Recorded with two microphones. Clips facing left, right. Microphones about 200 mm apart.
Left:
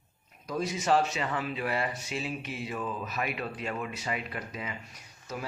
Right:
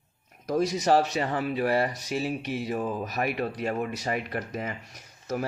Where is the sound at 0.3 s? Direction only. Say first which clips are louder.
Right 7 dB; 45° right (ahead or behind).